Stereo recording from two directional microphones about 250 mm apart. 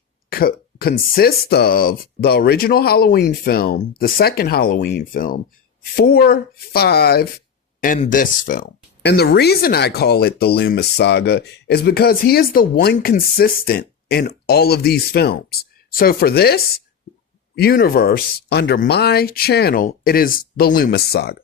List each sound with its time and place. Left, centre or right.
0.3 s speech: left
7.9 s speech: left